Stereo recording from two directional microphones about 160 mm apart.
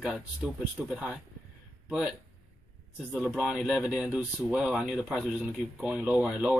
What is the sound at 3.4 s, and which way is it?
Speech, 5° right (ahead or behind).